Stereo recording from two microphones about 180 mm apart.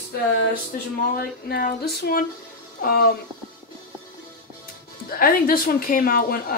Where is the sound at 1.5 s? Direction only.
60° left (ahead or behind).